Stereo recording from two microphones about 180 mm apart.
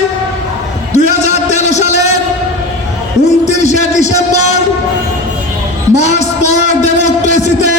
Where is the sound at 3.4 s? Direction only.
40° left (ahead or behind).